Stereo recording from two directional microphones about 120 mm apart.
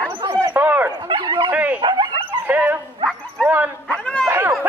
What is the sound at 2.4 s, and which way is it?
Dog, 15° right (ahead or behind).